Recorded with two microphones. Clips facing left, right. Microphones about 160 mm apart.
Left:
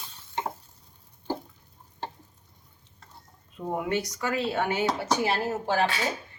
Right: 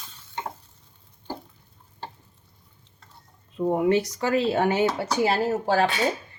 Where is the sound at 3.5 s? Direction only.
30° right (ahead or behind).